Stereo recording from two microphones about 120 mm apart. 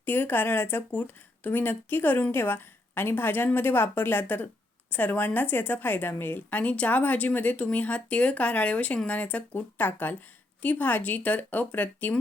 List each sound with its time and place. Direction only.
0.0 s speech: 15° left (ahead or behind)